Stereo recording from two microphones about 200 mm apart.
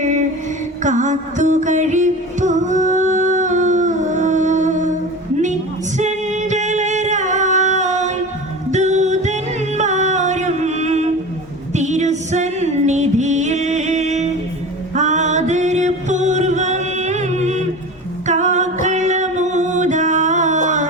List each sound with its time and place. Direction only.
0.0 s mantra: 40° right (ahead or behind)
0.8 s music: 40° right (ahead or behind)
6.0 s singing: 35° right (ahead or behind)
8.7 s music: 35° right (ahead or behind)